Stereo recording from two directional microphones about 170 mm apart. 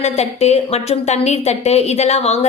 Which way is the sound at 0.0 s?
40° left (ahead or behind).